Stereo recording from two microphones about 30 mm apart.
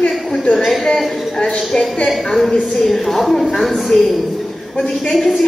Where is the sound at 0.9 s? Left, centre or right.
Centre.